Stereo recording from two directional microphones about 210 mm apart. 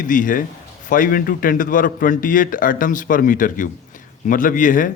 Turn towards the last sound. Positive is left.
turn(degrees=40)  # may be behind; listen again after turning